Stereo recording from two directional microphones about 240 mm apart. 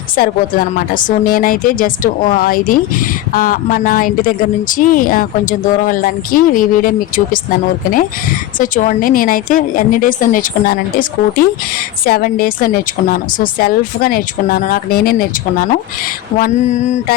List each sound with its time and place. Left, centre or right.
0.2 s speech: left
8.5 s speech: left
16.4 s mantra: left